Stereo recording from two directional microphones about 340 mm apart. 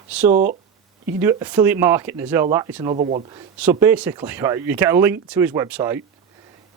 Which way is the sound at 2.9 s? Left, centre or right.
Centre.